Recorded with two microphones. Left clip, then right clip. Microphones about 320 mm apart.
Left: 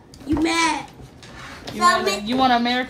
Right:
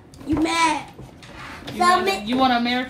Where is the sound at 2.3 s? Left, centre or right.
Centre.